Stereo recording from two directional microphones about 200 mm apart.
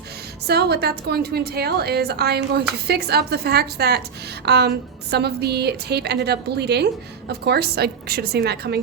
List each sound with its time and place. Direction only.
0.4 s a woman's voice: 55° right (ahead or behind)